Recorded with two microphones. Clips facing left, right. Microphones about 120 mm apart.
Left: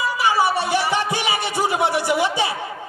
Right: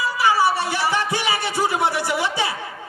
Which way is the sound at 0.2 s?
15° left (ahead or behind).